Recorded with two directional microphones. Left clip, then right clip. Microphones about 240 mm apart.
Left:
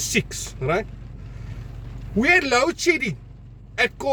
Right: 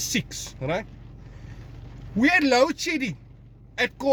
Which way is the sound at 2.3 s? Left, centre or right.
Centre.